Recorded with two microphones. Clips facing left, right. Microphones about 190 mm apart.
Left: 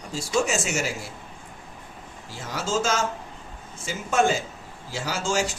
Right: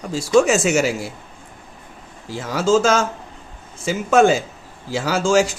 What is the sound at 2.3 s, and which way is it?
Speech, 90° right.